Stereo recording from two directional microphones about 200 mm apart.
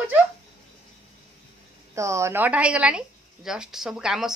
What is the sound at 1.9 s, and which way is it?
Speech, 15° right (ahead or behind).